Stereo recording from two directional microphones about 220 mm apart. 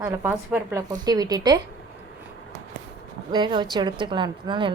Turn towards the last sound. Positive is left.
turn(degrees=-20)  # may be behind; listen again after turning